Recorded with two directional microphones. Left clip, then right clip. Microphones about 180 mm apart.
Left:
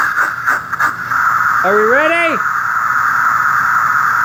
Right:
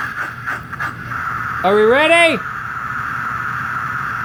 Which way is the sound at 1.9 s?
25° right (ahead or behind).